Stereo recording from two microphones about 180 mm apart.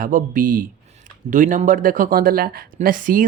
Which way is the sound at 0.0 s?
50° right (ahead or behind).